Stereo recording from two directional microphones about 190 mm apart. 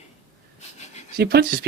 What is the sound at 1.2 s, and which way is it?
Speech, 60° right (ahead or behind).